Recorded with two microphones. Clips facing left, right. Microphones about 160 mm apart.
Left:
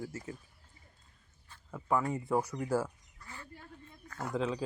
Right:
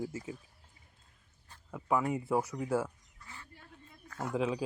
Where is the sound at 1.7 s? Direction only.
10° right (ahead or behind).